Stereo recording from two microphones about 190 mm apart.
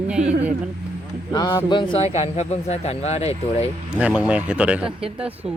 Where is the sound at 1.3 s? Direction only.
20° left (ahead or behind).